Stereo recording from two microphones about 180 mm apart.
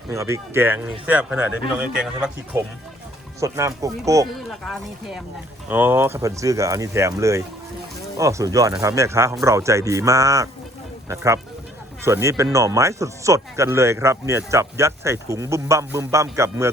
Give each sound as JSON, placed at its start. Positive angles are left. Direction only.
{"t": 0.1, "sound": "speech", "side_deg": -15}
{"t": 3.4, "sound": "speech", "side_deg": -15}
{"t": 4.4, "sound": "speech", "side_deg": 0}
{"t": 5.6, "sound": "speech", "side_deg": -10}